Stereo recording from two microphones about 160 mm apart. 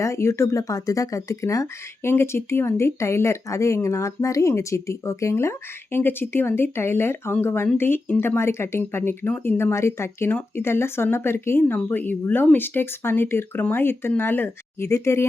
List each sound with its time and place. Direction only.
0.0 s speech: 15° left (ahead or behind)